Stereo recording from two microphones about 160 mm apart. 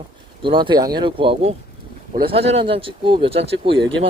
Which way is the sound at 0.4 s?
30° right (ahead or behind).